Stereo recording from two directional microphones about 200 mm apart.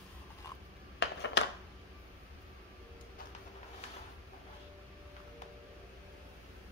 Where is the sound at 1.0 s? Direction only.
60° left (ahead or behind).